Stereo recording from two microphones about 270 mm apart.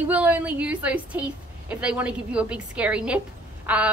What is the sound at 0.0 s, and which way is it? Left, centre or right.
A woman's voice, centre.